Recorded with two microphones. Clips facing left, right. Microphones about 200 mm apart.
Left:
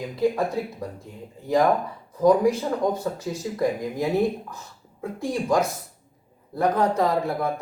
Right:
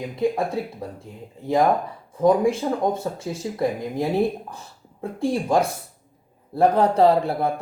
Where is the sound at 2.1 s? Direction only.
30° right (ahead or behind).